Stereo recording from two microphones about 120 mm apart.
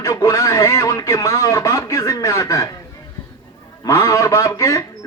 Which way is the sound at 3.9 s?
25° left (ahead or behind).